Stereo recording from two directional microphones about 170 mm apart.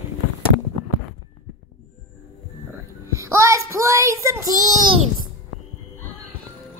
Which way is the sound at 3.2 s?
15° right (ahead or behind).